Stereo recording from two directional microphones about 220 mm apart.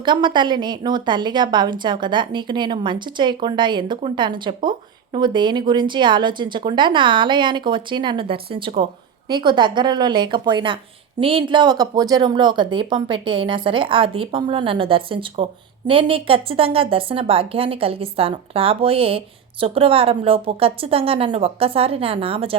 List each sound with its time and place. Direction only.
0.0 s a woman's voice: 20° right (ahead or behind)